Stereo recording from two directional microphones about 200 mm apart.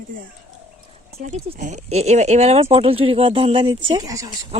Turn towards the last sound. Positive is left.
turn(degrees=-20)  # may be behind; listen again after turning